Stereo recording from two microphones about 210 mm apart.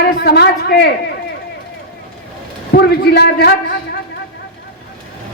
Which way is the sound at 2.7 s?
50° left (ahead or behind).